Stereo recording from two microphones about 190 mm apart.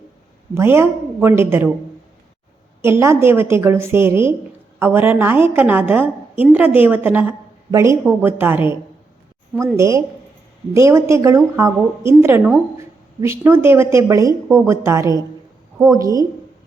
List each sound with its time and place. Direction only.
0.5 s a woman's voice: 15° right (ahead or behind)
2.8 s a woman's voice: 15° right (ahead or behind)
9.7 s a woman's voice: 15° right (ahead or behind)